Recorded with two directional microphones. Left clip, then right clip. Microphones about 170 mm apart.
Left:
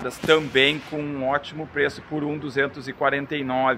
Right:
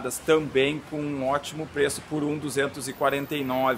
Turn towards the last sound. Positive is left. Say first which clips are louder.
# left 3 dB
turn(degrees=-10)  # may be behind; listen again after turning